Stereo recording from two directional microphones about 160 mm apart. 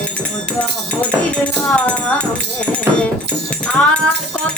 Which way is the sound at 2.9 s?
15° right (ahead or behind).